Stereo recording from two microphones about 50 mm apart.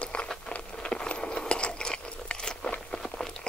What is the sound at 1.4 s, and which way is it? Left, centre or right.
Crunch, left.